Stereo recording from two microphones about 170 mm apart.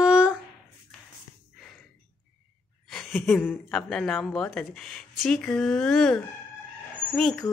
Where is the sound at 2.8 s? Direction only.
5° left (ahead or behind).